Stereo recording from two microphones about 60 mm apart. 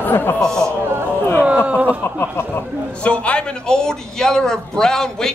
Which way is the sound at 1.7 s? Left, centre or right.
Right.